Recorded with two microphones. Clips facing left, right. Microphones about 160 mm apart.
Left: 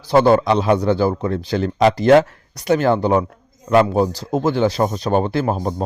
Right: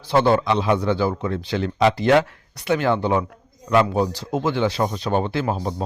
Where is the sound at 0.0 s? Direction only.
40° left (ahead or behind).